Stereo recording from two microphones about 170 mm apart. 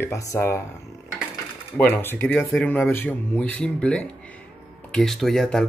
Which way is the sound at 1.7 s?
10° left (ahead or behind).